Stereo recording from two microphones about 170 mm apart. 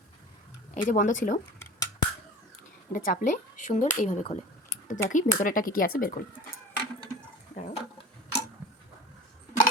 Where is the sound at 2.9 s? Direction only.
55° left (ahead or behind).